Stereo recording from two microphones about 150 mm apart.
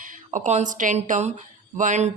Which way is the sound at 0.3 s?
55° right (ahead or behind).